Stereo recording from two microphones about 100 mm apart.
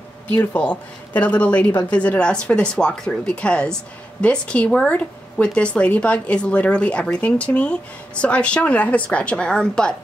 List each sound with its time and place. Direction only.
0.3 s speech: 15° left (ahead or behind)